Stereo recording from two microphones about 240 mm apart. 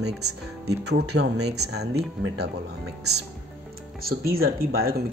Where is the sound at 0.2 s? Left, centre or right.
Right.